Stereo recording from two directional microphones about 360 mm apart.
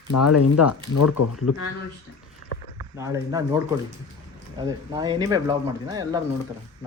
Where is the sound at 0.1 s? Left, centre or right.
Left.